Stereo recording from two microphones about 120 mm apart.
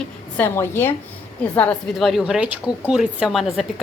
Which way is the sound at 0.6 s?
20° left (ahead or behind).